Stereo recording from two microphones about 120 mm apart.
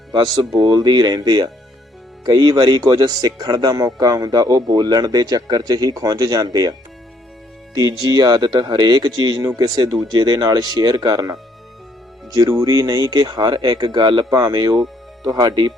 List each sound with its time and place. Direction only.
0.1 s a man's voice: 35° right (ahead or behind)
7.8 s a man's voice: 30° right (ahead or behind)